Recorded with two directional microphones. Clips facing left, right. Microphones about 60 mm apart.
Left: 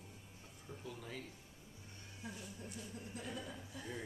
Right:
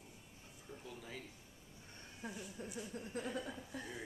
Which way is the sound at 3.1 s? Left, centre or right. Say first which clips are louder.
Right 6 dB; right.